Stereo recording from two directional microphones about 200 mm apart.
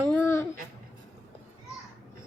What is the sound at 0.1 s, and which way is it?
Babbling, 15° left (ahead or behind).